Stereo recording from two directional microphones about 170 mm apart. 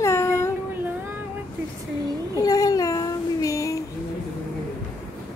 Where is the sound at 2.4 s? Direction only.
20° left (ahead or behind).